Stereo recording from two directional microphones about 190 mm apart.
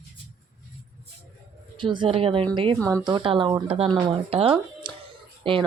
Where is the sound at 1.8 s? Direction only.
25° right (ahead or behind).